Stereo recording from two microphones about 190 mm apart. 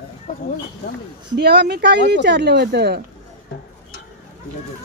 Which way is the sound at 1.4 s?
60° right (ahead or behind).